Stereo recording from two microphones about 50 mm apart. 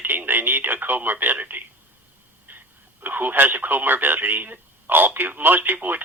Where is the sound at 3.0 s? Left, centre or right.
Right.